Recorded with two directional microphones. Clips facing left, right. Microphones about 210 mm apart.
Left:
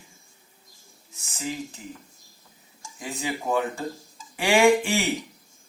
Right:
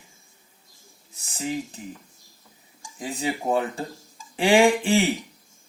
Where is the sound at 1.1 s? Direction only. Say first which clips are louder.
Right 4 dB; 35° right (ahead or behind).